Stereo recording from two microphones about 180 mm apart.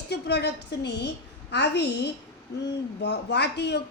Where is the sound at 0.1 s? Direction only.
70° left (ahead or behind).